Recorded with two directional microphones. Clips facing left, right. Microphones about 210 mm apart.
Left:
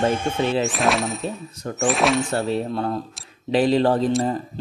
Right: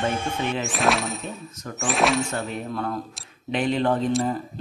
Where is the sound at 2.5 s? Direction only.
30° left (ahead or behind).